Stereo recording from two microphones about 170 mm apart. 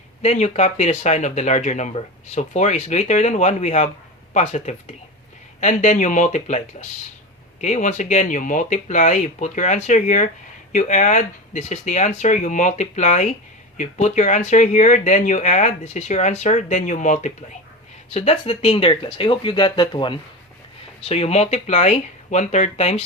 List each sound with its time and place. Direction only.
0.2 s speech: 40° left (ahead or behind)
18.1 s speech: 35° left (ahead or behind)
21.1 s speech: 40° left (ahead or behind)